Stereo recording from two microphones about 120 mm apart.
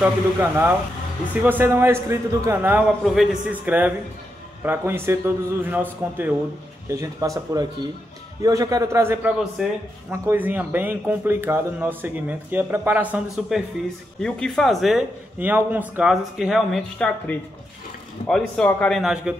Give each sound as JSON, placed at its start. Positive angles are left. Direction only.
{"t": 0.0, "sound": "a man's voice", "side_deg": -20}
{"t": 3.0, "sound": "speech", "side_deg": 0}
{"t": 3.6, "sound": "a man's voice", "side_deg": -15}
{"t": 6.9, "sound": "a man's voice", "side_deg": -30}
{"t": 9.6, "sound": "a man's voice", "side_deg": -5}
{"t": 14.2, "sound": "speech", "side_deg": 5}
{"t": 15.3, "sound": "a man's voice", "side_deg": -15}
{"t": 16.0, "sound": "speech", "side_deg": -5}
{"t": 18.2, "sound": "speech", "side_deg": 5}